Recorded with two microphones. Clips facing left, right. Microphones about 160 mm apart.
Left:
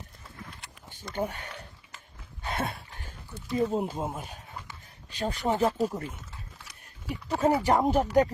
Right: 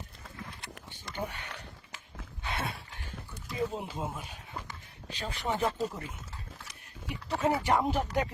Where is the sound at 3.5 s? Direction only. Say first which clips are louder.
Left 7 dB; 45° left (ahead or behind).